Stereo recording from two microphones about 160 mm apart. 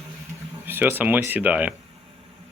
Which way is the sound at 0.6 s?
15° right (ahead or behind).